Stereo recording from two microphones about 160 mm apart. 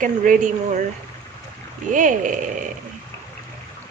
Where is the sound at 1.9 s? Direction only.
55° right (ahead or behind).